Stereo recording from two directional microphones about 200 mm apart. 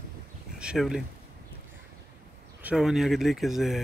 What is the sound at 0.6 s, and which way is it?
Speech, 5° right (ahead or behind).